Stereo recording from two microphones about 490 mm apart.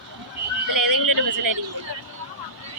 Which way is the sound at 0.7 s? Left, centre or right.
Right.